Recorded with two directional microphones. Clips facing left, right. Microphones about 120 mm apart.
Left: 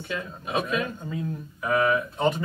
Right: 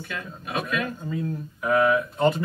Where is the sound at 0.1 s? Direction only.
25° left (ahead or behind).